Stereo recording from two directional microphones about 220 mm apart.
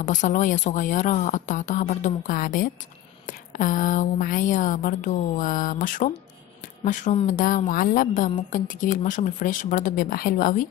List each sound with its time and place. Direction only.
0.0 s speech: 35° left (ahead or behind)